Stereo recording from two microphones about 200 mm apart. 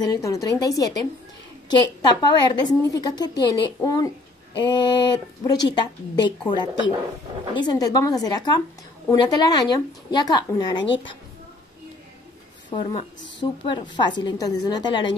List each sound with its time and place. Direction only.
0.0 s a woman's voice: 15° left (ahead or behind)
12.6 s a woman's voice: 30° left (ahead or behind)